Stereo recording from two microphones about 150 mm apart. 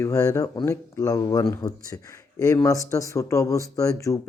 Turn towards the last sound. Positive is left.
turn(degrees=20)  # may be behind; listen again after turning